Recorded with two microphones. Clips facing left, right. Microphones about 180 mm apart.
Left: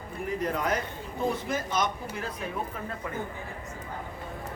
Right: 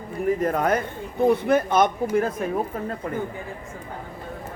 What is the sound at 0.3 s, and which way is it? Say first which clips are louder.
A man's voice: right 3 dB; 50° right (ahead or behind).